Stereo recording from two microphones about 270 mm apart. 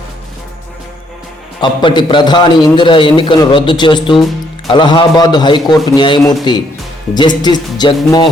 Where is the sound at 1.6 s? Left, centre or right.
Centre.